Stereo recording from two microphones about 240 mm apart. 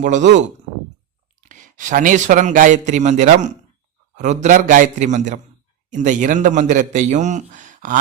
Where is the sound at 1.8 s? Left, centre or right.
Right.